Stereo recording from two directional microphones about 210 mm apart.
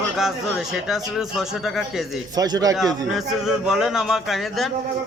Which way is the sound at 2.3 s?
20° right (ahead or behind).